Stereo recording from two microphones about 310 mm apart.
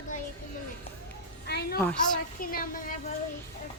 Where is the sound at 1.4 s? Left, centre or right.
Left.